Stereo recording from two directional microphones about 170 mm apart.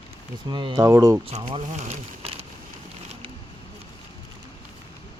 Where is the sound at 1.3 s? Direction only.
30° right (ahead or behind).